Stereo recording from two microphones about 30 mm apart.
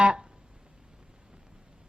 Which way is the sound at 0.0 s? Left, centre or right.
Right.